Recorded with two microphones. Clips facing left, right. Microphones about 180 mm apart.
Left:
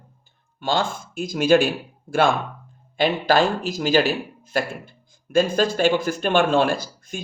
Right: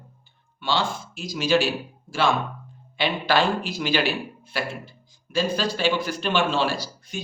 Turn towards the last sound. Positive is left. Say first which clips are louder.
# left 4 dB
turn(degrees=50)  # may be behind; listen again after turning